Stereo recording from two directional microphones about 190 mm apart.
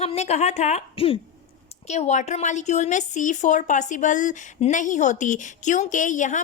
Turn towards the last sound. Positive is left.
turn(degrees=40)  # may be behind; listen again after turning